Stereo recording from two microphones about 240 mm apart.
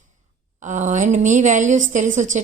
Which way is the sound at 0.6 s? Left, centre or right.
Right.